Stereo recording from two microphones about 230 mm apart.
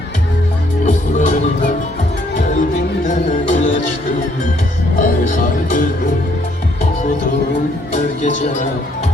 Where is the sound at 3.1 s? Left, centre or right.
Left.